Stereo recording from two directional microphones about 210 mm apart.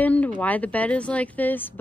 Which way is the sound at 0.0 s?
5° left (ahead or behind).